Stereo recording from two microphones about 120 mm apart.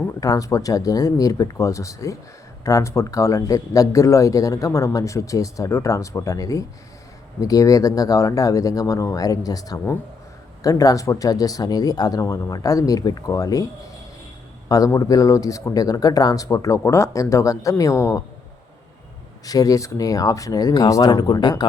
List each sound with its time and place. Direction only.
0.2 s speech: 30° left (ahead or behind)
14.7 s speech: 25° left (ahead or behind)
19.5 s speech: 30° left (ahead or behind)